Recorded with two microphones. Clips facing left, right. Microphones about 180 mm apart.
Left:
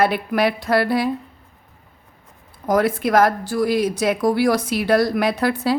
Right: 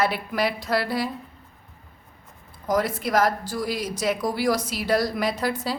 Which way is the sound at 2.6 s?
60° left (ahead or behind).